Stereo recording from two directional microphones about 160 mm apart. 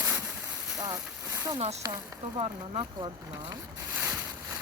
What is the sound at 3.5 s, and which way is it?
Boat, 15° right (ahead or behind).